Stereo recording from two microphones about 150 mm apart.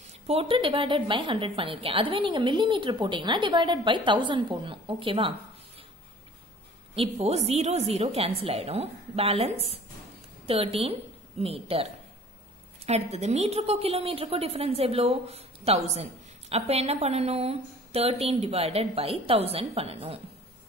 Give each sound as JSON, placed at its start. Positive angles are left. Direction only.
{"t": 0.3, "sound": "a woman's voice", "side_deg": -40}
{"t": 7.0, "sound": "a woman's voice", "side_deg": -45}